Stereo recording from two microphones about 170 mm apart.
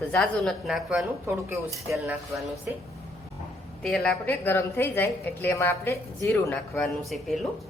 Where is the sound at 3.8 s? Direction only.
5° left (ahead or behind).